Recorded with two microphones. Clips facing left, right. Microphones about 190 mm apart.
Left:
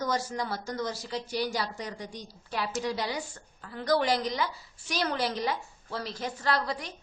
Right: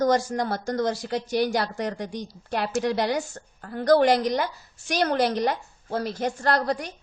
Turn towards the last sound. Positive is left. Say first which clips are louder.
# right 6 dB
turn(degrees=-60)  # may be behind; listen again after turning